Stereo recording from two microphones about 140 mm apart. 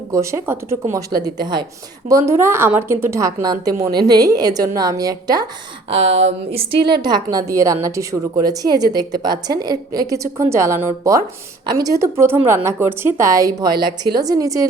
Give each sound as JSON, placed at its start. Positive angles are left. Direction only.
{"t": 0.1, "sound": "a woman's voice", "side_deg": -20}
{"t": 5.9, "sound": "speech", "side_deg": -45}
{"t": 7.0, "sound": "a woman's voice", "side_deg": -30}